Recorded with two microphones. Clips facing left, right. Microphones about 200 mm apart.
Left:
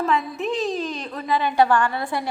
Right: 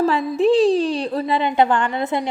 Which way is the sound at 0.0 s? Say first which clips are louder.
Right 7 dB; 30° right (ahead or behind).